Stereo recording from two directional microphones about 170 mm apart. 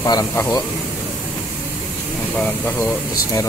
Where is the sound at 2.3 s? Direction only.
10° left (ahead or behind).